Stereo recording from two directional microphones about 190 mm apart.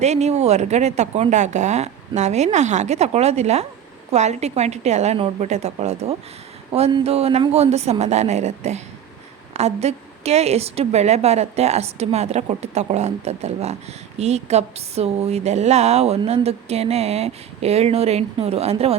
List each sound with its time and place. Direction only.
0.0 s speech: 35° right (ahead or behind)